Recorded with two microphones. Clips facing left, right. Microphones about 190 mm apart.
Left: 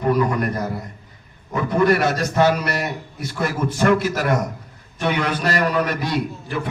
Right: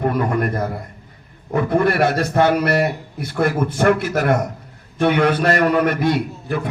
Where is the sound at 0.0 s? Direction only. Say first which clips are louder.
Even; 55° right (ahead or behind).